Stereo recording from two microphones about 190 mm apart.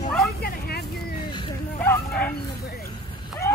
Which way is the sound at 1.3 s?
25° left (ahead or behind).